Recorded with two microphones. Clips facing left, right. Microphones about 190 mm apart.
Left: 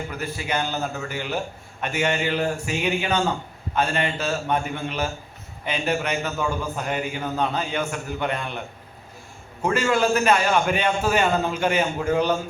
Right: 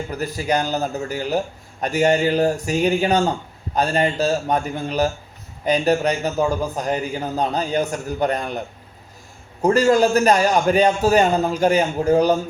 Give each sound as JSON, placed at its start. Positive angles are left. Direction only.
{"t": 0.1, "sound": "a man's voice", "side_deg": -40}